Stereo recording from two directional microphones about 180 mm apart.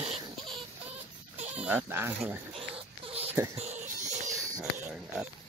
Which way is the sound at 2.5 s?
30° right (ahead or behind).